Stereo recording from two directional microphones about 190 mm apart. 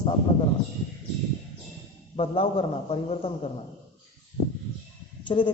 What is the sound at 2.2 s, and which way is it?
A man's voice, 30° left (ahead or behind).